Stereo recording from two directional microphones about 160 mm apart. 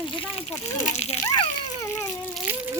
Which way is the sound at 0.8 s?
45° left (ahead or behind).